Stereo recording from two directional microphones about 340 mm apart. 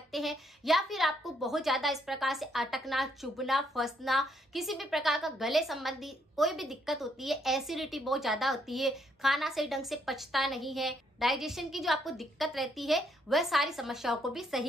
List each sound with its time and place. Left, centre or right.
0.1 s a woman's voice: centre